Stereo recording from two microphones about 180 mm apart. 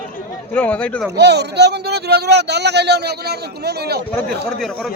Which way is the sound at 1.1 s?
70° right (ahead or behind).